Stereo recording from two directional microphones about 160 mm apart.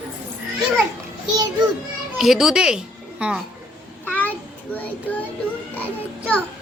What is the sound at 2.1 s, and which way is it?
A child's voice, centre (ahead or behind).